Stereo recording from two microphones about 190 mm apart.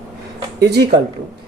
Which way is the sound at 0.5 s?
60° right (ahead or behind).